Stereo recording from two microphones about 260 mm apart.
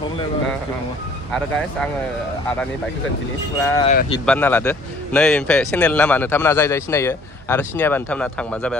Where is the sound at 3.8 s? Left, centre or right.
Left.